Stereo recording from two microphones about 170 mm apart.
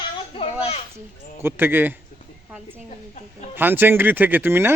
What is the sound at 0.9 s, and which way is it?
Speech, 15° right (ahead or behind).